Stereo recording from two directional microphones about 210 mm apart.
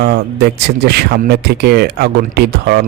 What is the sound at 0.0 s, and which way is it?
Speech, 50° right (ahead or behind).